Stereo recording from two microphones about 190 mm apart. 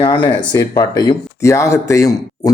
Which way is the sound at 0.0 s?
25° left (ahead or behind).